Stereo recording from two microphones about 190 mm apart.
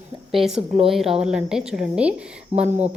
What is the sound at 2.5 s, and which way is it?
Speech, 40° right (ahead or behind).